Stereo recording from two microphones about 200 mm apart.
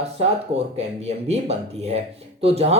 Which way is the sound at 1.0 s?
30° right (ahead or behind).